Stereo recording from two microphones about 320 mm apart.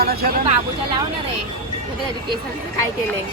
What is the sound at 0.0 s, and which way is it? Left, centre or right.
Speech, right.